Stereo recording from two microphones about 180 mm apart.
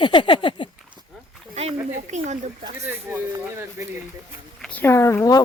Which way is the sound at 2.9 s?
10° right (ahead or behind).